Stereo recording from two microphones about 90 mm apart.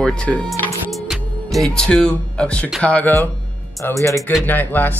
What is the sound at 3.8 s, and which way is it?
Speech, 25° left (ahead or behind).